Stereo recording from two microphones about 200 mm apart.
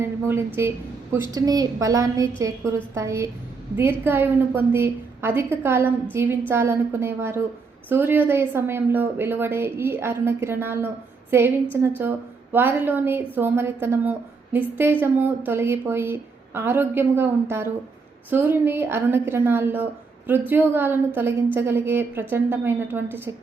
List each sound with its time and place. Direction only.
0.0 s a woman's voice: 10° right (ahead or behind)